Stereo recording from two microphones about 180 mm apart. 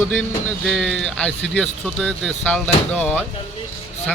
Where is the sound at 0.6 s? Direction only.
Centre (ahead or behind).